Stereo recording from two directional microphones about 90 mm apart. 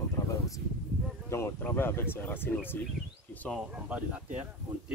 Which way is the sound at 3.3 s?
15° left (ahead or behind).